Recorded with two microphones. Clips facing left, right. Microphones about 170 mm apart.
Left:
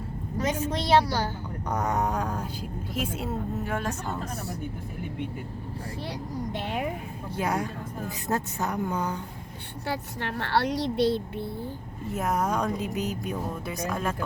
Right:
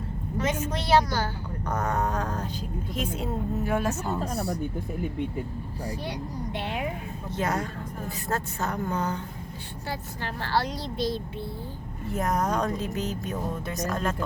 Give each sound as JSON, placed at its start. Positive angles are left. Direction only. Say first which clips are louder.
{"t": 0.3, "sound": "a woman's voice", "louder": "left 1 dB", "side_deg": 35}
{"t": 1.6, "sound": "a woman's voice", "louder": "left 1 dB", "side_deg": 15}
{"t": 3.7, "sound": "speech", "louder": "right 4 dB", "side_deg": -10}
{"t": 4.2, "sound": "speech", "louder": "right 5 dB", "side_deg": -35}
{"t": 7.3, "sound": "speech", "louder": "even", "side_deg": 10}
{"t": 9.8, "sound": "speech", "louder": "left 3 dB", "side_deg": 65}
{"t": 12.1, "sound": "speech", "louder": "right 1 dB", "side_deg": 5}